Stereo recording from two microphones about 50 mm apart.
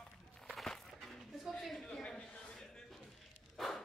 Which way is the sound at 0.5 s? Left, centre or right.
Centre.